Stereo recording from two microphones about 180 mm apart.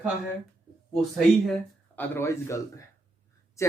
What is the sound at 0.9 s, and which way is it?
Speech, centre (ahead or behind).